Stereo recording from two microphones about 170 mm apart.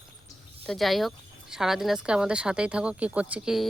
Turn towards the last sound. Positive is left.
turn(degrees=-5)  # may be behind; listen again after turning